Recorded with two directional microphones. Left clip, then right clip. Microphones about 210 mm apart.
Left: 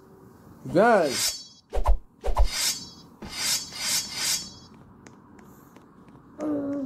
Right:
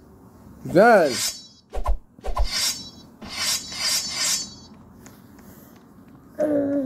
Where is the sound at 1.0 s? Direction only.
Centre (ahead or behind).